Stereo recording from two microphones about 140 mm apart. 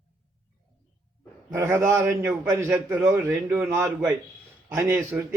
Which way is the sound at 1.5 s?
20° right (ahead or behind).